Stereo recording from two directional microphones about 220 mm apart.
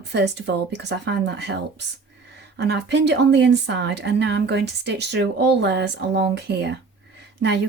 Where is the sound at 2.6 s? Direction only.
50° right (ahead or behind).